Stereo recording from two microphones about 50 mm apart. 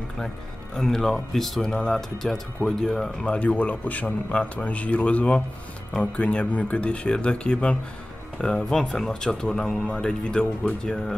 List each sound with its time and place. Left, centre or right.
0.7 s speech: centre
3.3 s speech: left